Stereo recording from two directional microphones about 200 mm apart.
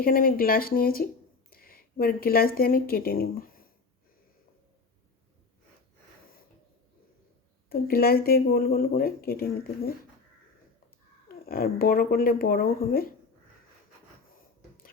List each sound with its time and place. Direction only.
0.0 s speech: 45° left (ahead or behind)
7.7 s speech: 50° left (ahead or behind)
11.4 s speech: 50° left (ahead or behind)